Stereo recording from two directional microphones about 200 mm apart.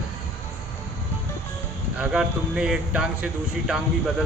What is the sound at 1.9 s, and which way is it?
Speech, 5° right (ahead or behind).